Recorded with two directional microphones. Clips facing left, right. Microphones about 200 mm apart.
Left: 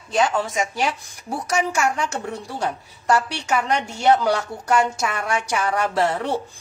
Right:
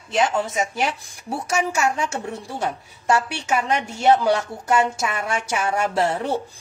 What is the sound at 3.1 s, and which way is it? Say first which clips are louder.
A woman's voice: even; 25° right (ahead or behind).